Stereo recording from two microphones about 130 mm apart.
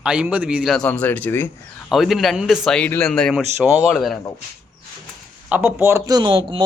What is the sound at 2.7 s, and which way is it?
Speech, 15° left (ahead or behind).